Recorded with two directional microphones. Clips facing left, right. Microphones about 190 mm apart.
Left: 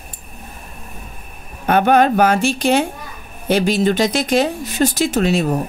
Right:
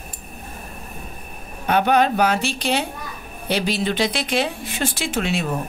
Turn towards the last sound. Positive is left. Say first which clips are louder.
# left 7 dB
turn(degrees=40)  # may be behind; listen again after turning